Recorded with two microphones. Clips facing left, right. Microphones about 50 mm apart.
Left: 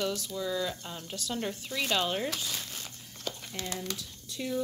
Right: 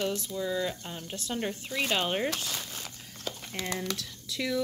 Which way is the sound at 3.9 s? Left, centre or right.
Right.